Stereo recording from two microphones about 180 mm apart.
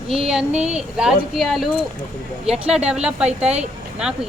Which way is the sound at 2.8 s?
35° right (ahead or behind).